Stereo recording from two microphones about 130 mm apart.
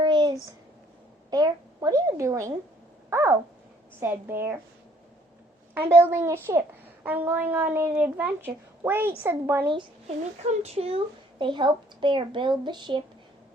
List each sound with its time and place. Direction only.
0.0 s a sound: 35° right (ahead or behind)
1.3 s a woman's voice: 30° right (ahead or behind)
3.1 s a sound: 20° right (ahead or behind)
4.0 s a child's voice: 15° right (ahead or behind)
5.7 s a child's voice: 15° right (ahead or behind)
10.5 s a child's voice: 55° right (ahead or behind); by 13.0 s 35° right (ahead or behind)